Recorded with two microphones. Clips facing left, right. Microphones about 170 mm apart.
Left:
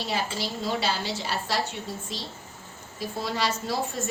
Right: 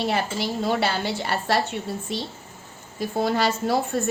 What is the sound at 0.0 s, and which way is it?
A woman's voice, 60° right (ahead or behind).